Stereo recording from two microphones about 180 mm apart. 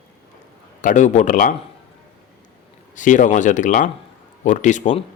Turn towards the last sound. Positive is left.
turn(degrees=40)  # may be behind; listen again after turning